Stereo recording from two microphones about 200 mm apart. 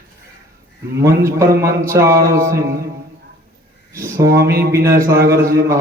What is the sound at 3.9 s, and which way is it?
Music, 15° right (ahead or behind).